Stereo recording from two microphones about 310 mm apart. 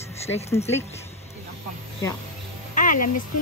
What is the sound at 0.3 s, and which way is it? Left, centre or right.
Speech, centre.